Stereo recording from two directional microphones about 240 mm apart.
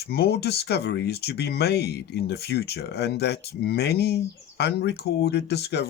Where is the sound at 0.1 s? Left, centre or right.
Left.